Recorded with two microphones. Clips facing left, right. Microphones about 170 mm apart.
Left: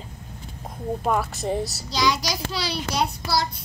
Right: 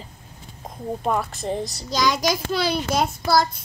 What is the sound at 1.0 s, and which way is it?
Speech, centre (ahead or behind).